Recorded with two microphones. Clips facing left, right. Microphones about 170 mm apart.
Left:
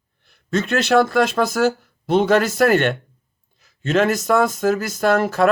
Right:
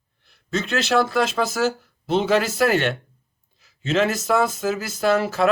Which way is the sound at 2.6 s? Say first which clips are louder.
Left 4 dB; 50° left (ahead or behind).